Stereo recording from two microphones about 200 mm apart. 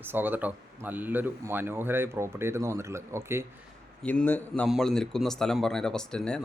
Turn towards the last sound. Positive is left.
turn(degrees=5)  # may be behind; listen again after turning